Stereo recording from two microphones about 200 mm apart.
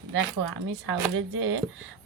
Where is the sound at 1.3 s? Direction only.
70° right (ahead or behind).